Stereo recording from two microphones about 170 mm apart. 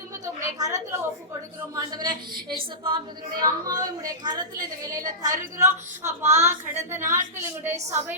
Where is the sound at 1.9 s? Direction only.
25° right (ahead or behind).